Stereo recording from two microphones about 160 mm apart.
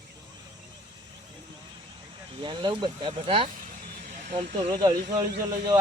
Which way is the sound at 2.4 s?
30° right (ahead or behind).